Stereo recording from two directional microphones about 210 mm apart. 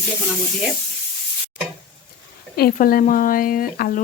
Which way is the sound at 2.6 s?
45° left (ahead or behind).